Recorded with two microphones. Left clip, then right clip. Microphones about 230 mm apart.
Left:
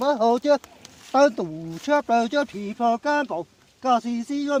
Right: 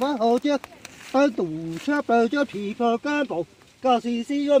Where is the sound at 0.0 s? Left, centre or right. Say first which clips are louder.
Left 1 dB; left.